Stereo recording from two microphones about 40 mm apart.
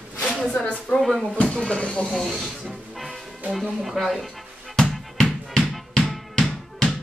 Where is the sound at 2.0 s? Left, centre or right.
Centre.